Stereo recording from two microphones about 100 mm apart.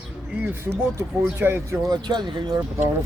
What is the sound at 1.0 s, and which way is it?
Speech, 20° right (ahead or behind).